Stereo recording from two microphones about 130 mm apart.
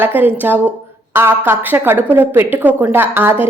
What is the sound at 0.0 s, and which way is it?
Speech, 15° right (ahead or behind).